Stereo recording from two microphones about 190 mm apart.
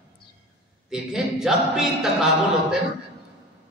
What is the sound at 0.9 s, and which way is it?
A man's voice, 5° right (ahead or behind).